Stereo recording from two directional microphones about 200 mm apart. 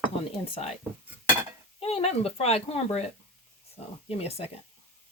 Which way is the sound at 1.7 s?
30° left (ahead or behind).